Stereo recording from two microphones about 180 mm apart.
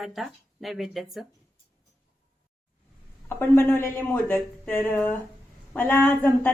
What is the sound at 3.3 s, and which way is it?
A woman's voice, 10° left (ahead or behind).